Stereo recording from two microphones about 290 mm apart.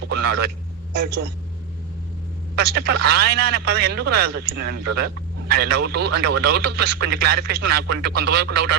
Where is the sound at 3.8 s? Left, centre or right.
Right.